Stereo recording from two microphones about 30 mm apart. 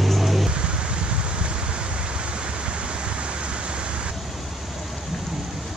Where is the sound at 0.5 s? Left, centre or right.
Right.